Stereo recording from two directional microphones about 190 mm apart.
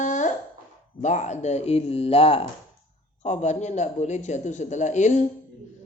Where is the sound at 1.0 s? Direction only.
40° left (ahead or behind).